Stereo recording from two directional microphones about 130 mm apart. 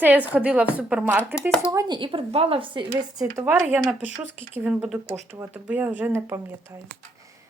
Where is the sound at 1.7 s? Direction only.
25° right (ahead or behind).